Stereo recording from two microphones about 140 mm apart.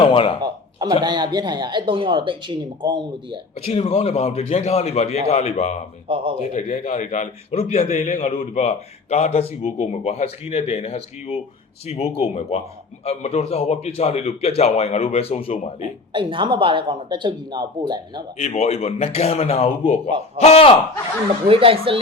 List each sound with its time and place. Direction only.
0.0 s speech: 40° left (ahead or behind)
0.4 s speech: 30° right (ahead or behind)
3.6 s a man's voice: 45° left (ahead or behind)
6.1 s speech: 40° right (ahead or behind)
6.4 s a man's voice: 55° left (ahead or behind)
16.1 s speech: 35° right (ahead or behind)
18.3 s a man's voice: 50° left (ahead or behind)
21.4 s speech: 40° right (ahead or behind)